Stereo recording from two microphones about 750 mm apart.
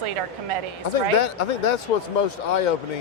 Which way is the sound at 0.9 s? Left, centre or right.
Left.